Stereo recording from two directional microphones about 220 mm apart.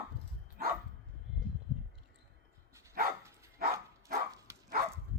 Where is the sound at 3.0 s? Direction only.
40° right (ahead or behind).